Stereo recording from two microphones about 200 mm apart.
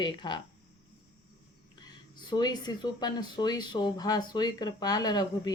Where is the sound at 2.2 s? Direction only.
20° left (ahead or behind).